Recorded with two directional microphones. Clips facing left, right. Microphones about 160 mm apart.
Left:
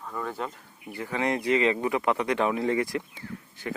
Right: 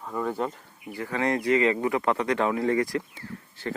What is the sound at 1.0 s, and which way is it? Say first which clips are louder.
Speech: right 1 dB; 20° left (ahead or behind).